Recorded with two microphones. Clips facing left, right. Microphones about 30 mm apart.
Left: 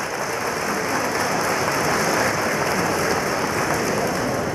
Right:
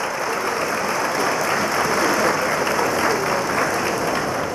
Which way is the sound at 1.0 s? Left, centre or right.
Centre.